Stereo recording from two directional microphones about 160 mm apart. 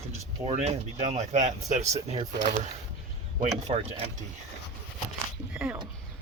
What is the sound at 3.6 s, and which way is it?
Speech, 35° right (ahead or behind).